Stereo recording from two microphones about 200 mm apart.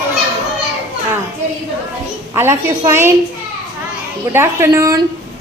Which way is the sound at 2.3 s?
15° right (ahead or behind).